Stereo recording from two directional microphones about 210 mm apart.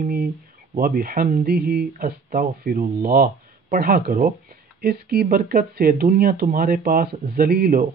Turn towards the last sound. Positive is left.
turn(degrees=-45)  # may be behind; listen again after turning